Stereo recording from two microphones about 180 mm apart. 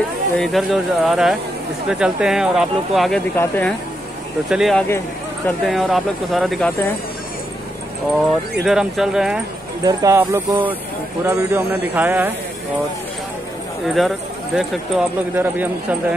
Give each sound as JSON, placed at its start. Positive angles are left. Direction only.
{"t": 0.4, "sound": "speech", "side_deg": 0}
{"t": 3.3, "sound": "speech", "side_deg": 10}
{"t": 4.5, "sound": "speech", "side_deg": 0}
{"t": 8.6, "sound": "speech", "side_deg": -5}
{"t": 9.8, "sound": "speech", "side_deg": -15}
{"t": 13.8, "sound": "speech", "side_deg": 0}